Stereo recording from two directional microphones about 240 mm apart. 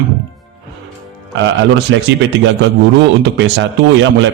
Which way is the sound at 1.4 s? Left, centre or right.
Right.